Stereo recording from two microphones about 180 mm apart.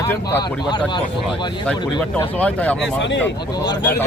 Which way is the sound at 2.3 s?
10° left (ahead or behind).